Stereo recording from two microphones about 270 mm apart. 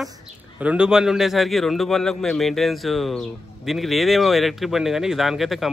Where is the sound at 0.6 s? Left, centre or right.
Centre.